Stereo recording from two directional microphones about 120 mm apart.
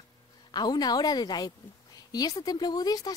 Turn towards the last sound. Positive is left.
turn(degrees=30)  # may be behind; listen again after turning